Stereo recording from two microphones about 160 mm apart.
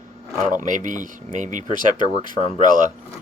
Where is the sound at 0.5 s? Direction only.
55° right (ahead or behind).